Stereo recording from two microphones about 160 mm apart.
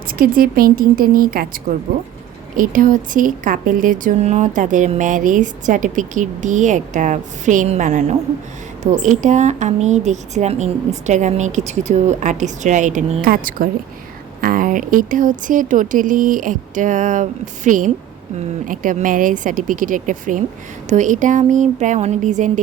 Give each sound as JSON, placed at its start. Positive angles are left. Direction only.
{"t": 0.1, "sound": "a woman's voice", "side_deg": -65}